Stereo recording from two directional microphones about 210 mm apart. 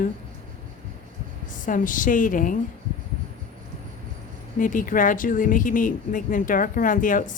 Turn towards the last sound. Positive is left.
turn(degrees=40)  # may be behind; listen again after turning